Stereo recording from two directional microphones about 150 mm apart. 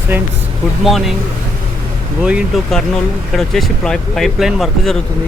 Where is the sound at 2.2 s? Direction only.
5° right (ahead or behind).